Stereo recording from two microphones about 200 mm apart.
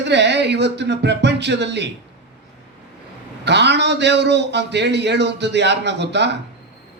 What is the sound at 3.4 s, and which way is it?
A man's voice, 60° right (ahead or behind).